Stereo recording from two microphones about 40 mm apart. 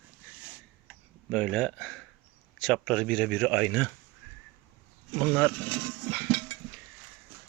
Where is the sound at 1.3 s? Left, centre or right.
Left.